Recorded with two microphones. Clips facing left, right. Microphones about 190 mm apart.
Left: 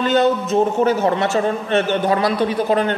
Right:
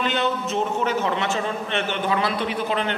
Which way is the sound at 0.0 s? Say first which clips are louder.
Left 8 dB; 40° left (ahead or behind).